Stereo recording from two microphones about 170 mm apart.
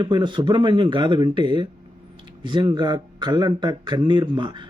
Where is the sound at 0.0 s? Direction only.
25° right (ahead or behind).